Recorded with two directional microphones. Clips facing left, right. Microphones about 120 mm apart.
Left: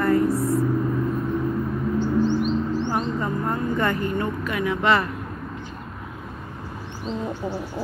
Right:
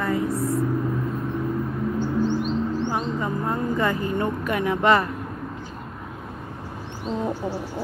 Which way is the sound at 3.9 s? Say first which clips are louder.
Even; 25° right (ahead or behind).